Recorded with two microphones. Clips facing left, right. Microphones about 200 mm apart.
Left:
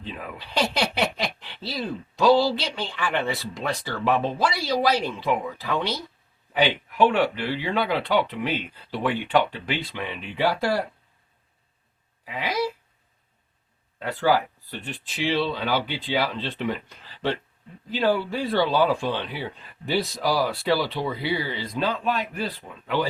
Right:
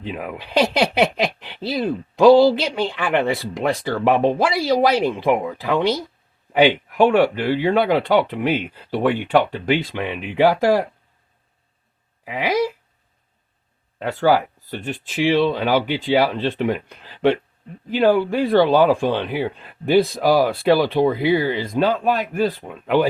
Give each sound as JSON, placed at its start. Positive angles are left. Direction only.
{"t": 0.0, "sound": "speech", "side_deg": -55}
{"t": 12.2, "sound": "speech", "side_deg": -50}
{"t": 14.0, "sound": "speech", "side_deg": -45}